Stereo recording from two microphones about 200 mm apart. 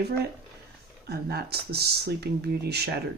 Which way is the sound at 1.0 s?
55° right (ahead or behind).